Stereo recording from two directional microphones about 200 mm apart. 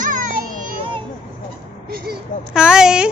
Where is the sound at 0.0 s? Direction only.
40° right (ahead or behind).